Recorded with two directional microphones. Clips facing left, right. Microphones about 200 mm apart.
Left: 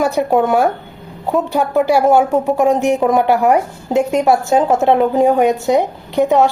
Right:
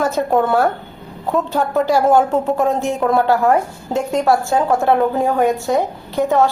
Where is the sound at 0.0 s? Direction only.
15° left (ahead or behind).